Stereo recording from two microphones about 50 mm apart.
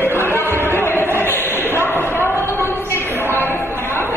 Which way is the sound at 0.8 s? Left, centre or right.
Left.